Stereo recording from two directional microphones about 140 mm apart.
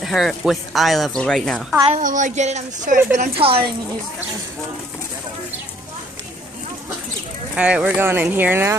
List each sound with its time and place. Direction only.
0.0 s a woman's voice: centre (ahead or behind)
1.9 s a woman's voice: 65° right (ahead or behind)
3.3 s speech: 40° right (ahead or behind)
7.5 s speech: 10° right (ahead or behind)